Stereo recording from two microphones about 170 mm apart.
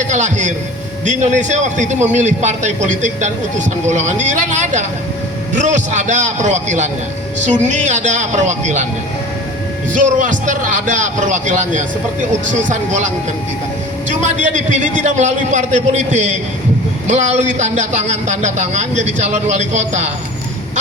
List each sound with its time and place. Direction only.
0.1 s a man's voice: 45° right (ahead or behind)
9.9 s a man's voice: 50° right (ahead or behind)
14.1 s a man's voice: 45° right (ahead or behind)